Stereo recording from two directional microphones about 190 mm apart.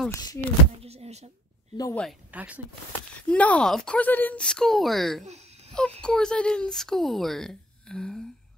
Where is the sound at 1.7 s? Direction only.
20° left (ahead or behind).